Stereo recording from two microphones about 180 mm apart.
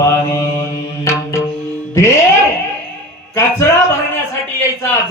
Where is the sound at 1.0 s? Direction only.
15° left (ahead or behind).